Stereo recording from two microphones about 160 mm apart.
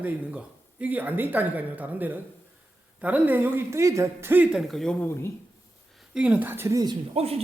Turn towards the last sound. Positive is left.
turn(degrees=-40)  # may be behind; listen again after turning